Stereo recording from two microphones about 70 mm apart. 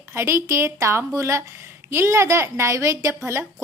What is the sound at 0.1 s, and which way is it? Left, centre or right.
A woman's voice, right.